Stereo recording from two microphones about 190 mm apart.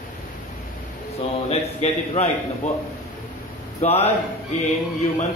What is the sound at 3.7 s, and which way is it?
Speech, 35° left (ahead or behind).